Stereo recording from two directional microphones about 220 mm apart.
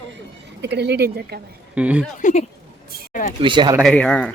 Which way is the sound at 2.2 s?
35° left (ahead or behind).